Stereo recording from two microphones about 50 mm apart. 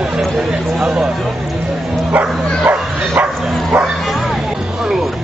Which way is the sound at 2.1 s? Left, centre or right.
Right.